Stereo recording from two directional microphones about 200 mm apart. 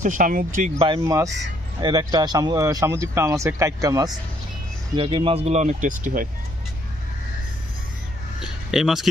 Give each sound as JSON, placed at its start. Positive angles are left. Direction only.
{"t": 0.0, "sound": "speech", "side_deg": -40}
{"t": 1.0, "sound": "speech", "side_deg": -15}
{"t": 8.4, "sound": "a sound", "side_deg": 0}